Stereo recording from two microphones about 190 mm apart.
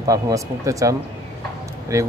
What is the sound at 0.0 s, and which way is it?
Speech, 15° right (ahead or behind).